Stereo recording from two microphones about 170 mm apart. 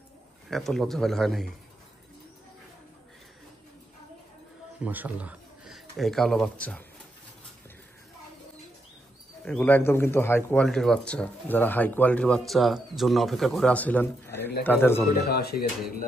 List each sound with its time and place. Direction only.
0.5 s a man's voice: centre (ahead or behind)
4.7 s speech: 10° right (ahead or behind)
9.4 s speech: 5° left (ahead or behind)
15.2 s speech: 70° left (ahead or behind)